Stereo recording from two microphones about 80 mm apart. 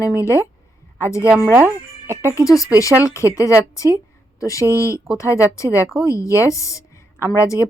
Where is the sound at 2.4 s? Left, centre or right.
Left.